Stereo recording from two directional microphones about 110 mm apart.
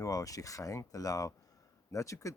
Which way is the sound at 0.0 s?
30° left (ahead or behind).